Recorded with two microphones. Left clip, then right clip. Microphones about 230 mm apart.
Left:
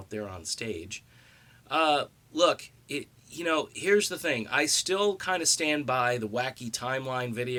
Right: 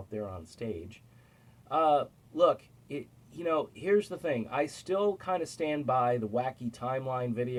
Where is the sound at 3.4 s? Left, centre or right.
Centre.